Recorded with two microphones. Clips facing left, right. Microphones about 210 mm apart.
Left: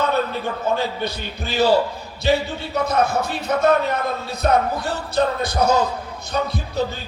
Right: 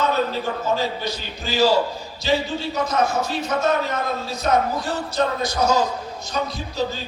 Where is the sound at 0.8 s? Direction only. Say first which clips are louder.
Left 1 dB; 60° left (ahead or behind).